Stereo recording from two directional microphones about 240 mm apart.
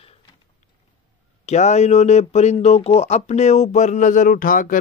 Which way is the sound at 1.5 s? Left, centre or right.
Left.